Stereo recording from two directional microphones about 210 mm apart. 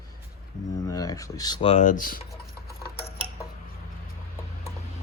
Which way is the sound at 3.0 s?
25° left (ahead or behind).